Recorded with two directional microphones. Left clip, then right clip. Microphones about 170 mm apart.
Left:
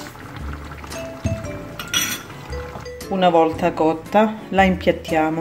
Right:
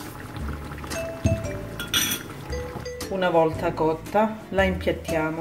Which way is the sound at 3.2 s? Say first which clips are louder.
Left 6 dB; 40° left (ahead or behind).